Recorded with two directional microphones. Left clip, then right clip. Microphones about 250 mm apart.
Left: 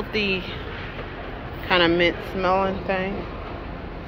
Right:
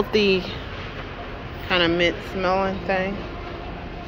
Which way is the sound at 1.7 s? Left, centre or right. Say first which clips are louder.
Left 1 dB; centre.